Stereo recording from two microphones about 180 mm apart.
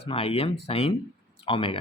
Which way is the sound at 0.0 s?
30° left (ahead or behind).